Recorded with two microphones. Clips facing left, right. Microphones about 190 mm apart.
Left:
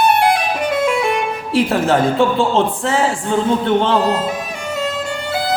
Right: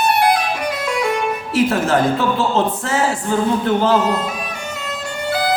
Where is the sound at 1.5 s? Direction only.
30° left (ahead or behind).